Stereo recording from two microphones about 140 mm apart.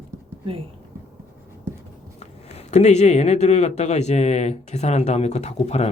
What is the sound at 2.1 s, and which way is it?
Speech, 55° left (ahead or behind).